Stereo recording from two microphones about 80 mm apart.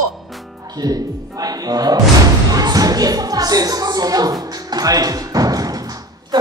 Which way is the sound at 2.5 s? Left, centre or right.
Right.